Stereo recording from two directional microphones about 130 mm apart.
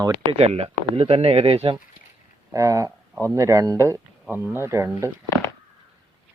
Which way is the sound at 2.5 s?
25° right (ahead or behind).